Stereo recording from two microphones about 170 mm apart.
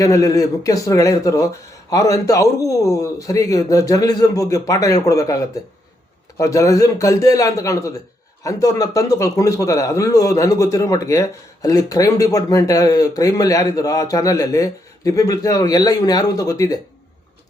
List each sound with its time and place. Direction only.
0.0 s a man's voice: 20° left (ahead or behind)